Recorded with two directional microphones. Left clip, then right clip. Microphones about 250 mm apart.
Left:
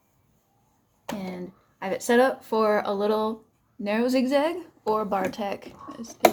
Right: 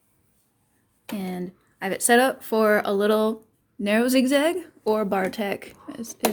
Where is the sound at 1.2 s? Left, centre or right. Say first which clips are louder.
Right 3 dB; right.